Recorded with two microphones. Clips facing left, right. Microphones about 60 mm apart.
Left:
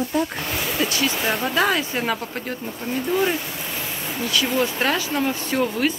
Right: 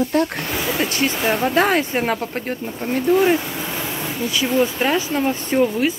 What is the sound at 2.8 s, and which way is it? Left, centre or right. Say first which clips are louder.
Speech: right 5 dB; right.